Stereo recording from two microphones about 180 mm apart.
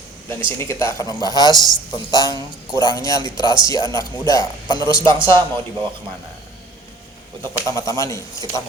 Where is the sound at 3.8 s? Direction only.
25° right (ahead or behind).